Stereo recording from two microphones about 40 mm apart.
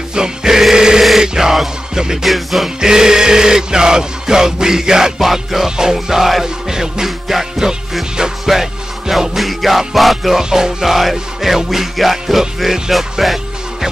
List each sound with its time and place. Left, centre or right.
0.1 s music: centre
2.8 s music: centre